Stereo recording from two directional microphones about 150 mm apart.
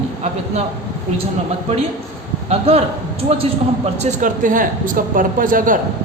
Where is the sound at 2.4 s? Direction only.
45° right (ahead or behind).